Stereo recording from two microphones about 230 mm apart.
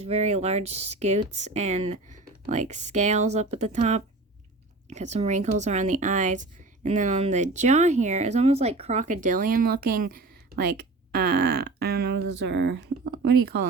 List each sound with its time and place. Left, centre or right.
0.0 s speech: right